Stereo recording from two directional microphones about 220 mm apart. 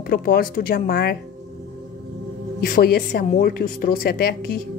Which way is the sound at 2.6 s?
45° left (ahead or behind).